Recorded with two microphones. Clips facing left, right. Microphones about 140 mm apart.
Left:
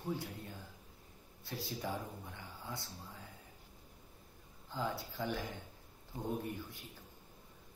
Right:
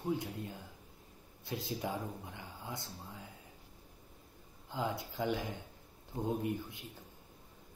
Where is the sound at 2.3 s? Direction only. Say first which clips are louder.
Right 2 dB; 20° right (ahead or behind).